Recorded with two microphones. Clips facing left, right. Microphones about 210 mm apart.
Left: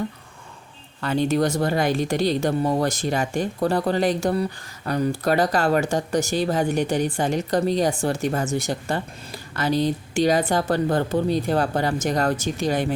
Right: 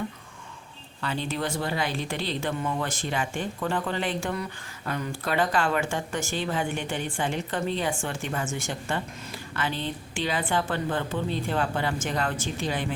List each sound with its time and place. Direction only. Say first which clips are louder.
1.0 s speech: left 9 dB; 45° left (ahead or behind)